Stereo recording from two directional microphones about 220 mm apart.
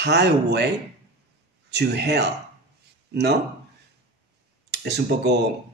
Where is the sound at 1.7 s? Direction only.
50° right (ahead or behind).